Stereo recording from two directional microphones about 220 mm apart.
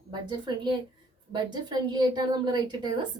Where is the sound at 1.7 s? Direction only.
20° right (ahead or behind).